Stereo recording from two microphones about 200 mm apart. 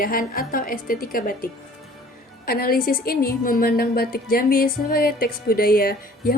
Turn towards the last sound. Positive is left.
turn(degrees=45)  # may be behind; listen again after turning